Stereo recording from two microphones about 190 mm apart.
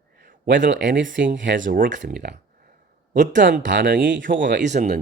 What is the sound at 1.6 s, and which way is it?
Speech, 45° right (ahead or behind).